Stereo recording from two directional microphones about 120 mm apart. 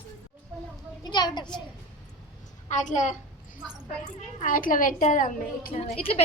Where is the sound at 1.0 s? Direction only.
35° left (ahead or behind).